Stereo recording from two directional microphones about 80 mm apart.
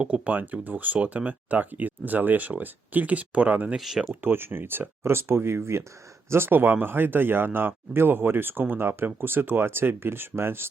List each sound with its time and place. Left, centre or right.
0.0 s speech: centre
3.8 s speech: centre
4.1 s speech: right